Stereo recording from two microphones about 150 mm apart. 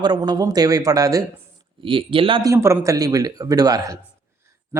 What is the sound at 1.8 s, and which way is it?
Speech, 35° right (ahead or behind).